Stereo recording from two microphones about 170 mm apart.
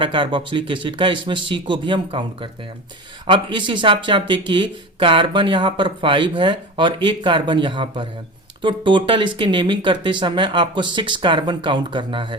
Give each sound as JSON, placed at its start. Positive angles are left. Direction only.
{"t": 0.0, "sound": "speech", "side_deg": -30}